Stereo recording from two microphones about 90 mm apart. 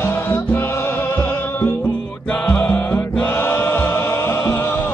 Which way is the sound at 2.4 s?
20° left (ahead or behind).